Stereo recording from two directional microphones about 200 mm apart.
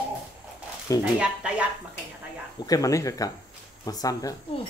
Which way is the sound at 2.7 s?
15° left (ahead or behind).